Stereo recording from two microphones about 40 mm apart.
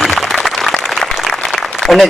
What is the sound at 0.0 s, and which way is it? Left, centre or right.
Applause, centre.